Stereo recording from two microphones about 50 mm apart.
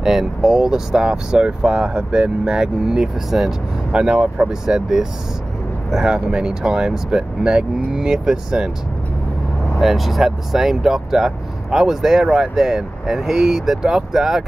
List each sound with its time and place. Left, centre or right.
0.0 s speech: centre
3.9 s speech: centre
9.8 s speech: centre